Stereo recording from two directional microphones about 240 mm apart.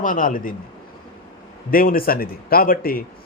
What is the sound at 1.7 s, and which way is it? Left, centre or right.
A man's voice, left.